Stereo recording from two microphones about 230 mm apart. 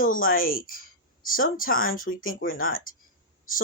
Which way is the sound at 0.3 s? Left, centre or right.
Left.